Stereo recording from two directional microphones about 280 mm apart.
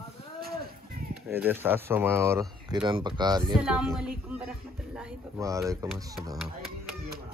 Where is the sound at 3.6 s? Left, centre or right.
Centre.